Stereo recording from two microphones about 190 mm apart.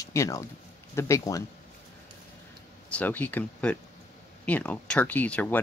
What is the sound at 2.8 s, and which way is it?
Speech, 10° left (ahead or behind).